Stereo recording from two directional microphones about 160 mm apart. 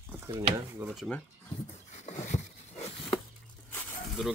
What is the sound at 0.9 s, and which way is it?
Speech, centre (ahead or behind).